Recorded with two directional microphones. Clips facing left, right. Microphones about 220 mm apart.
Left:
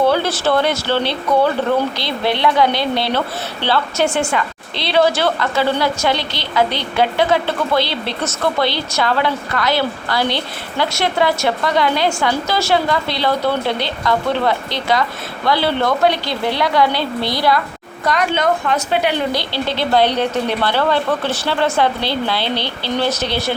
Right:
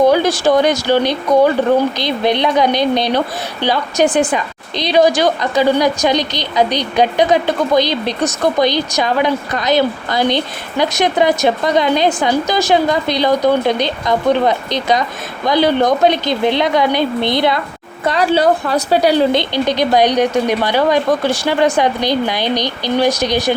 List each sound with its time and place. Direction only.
0.0 s a woman's voice: 15° right (ahead or behind); by 19.3 s 35° right (ahead or behind)
19.3 s a woman's voice: 20° right (ahead or behind)